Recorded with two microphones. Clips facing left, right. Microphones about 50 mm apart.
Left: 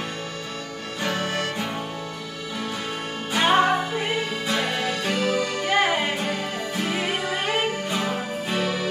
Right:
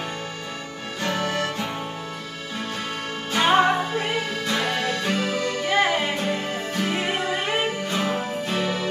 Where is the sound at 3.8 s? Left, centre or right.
Centre.